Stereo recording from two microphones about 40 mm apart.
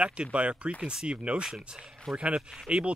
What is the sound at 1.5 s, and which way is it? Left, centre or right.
Speech, centre.